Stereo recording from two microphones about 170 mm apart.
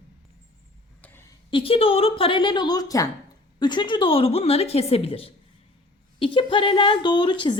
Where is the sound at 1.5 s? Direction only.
35° left (ahead or behind).